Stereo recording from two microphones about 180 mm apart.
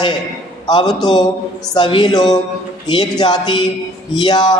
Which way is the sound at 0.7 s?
25° left (ahead or behind).